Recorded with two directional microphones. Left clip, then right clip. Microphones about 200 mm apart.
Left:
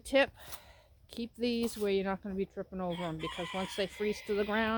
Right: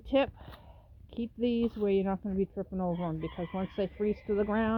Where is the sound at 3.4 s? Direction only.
35° left (ahead or behind).